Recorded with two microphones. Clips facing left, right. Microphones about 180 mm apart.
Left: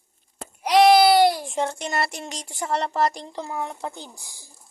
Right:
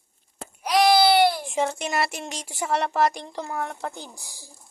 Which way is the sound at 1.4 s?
5° right (ahead or behind).